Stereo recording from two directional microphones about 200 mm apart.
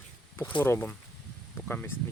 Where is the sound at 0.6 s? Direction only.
10° left (ahead or behind).